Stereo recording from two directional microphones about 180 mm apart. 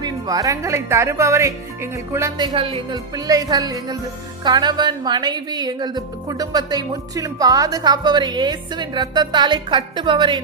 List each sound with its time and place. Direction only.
0.0 s speech: 20° right (ahead or behind)